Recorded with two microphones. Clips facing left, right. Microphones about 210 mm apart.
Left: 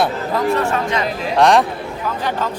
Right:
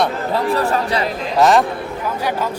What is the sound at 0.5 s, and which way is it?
Speech, 35° right (ahead or behind).